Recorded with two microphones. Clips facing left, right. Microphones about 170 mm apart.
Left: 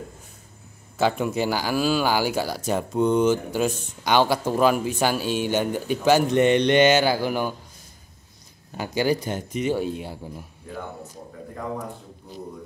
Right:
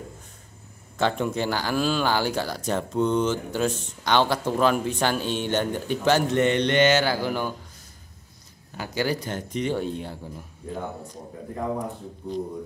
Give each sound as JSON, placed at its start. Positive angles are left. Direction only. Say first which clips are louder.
{"t": 0.9, "sound": "speech", "louder": "left 2 dB", "side_deg": 5}
{"t": 8.7, "sound": "speech", "louder": "left 4 dB", "side_deg": 15}